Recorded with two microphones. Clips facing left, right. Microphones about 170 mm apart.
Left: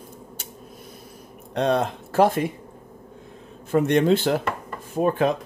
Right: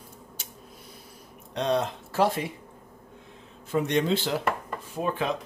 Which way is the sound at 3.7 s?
55° left (ahead or behind).